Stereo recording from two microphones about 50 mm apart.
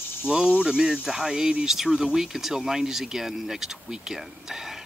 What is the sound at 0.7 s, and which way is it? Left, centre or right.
Speech, centre.